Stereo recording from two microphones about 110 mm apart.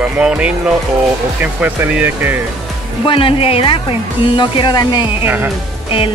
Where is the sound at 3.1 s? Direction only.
55° left (ahead or behind).